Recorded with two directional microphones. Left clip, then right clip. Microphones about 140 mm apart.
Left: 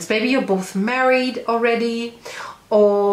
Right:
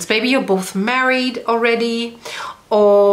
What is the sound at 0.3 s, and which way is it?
Speech, 30° right (ahead or behind).